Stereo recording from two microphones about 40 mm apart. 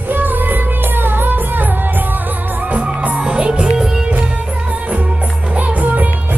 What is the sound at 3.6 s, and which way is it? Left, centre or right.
Music, centre.